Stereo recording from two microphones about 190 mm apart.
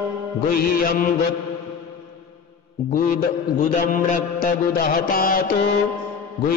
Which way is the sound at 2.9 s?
45° left (ahead or behind).